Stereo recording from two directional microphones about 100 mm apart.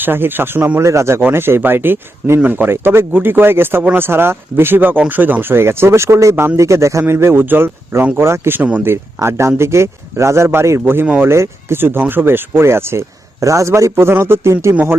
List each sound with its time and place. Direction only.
0.0 s speech: 20° right (ahead or behind)